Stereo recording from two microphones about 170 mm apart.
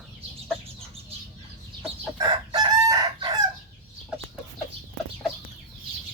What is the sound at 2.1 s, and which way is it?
Chicken, 25° right (ahead or behind).